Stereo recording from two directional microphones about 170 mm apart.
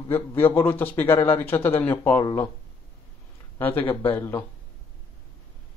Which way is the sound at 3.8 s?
10° left (ahead or behind).